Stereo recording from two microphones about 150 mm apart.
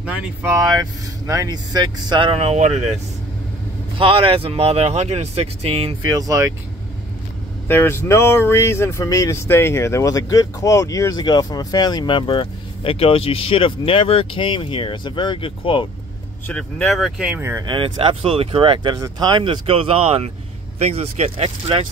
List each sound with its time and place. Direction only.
0.0 s speech: 10° right (ahead or behind)
0.6 s speech: 25° right (ahead or behind); by 2.8 s 45° right (ahead or behind)
4.0 s speech: 35° right (ahead or behind)
6.0 s speech: 25° right (ahead or behind)
7.6 s speech: 15° left (ahead or behind); by 15.9 s 35° left (ahead or behind)
16.4 s speech: 5° left (ahead or behind)
17.4 s speech: 15° right (ahead or behind)
17.6 s speech: 35° right (ahead or behind)